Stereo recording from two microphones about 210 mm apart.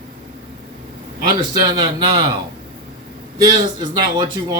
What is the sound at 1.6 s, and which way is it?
Speech, 20° right (ahead or behind).